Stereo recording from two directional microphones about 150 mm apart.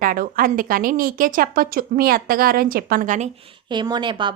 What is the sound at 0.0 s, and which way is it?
A woman's voice, 70° right (ahead or behind).